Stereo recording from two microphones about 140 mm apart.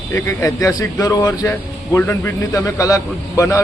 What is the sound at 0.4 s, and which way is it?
A man's voice, 25° left (ahead or behind).